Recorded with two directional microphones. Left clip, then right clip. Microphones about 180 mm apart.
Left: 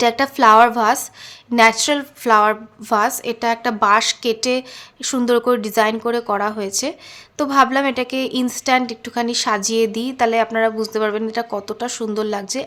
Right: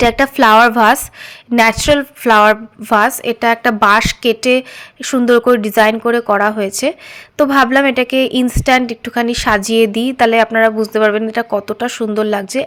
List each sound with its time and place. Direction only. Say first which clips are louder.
0.0 s a woman's voice: right 3 dB; 25° right (ahead or behind)